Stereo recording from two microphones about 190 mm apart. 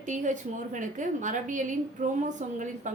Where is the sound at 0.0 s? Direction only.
40° right (ahead or behind).